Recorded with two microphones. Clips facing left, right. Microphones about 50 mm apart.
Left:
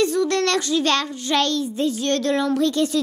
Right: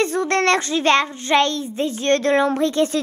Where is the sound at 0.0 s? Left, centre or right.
Right.